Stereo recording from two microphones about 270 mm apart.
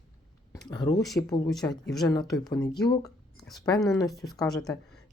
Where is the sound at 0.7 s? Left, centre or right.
Centre.